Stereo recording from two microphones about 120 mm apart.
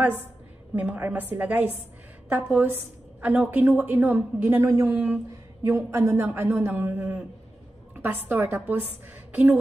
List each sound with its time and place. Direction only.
0.7 s a woman's voice: 15° right (ahead or behind)